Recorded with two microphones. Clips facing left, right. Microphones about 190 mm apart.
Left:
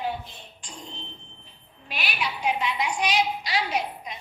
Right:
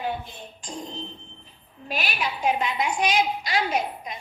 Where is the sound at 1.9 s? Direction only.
45° right (ahead or behind).